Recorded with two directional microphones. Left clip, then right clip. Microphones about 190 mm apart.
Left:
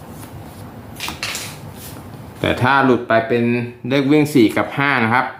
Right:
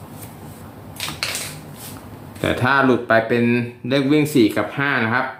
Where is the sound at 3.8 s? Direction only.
10° left (ahead or behind).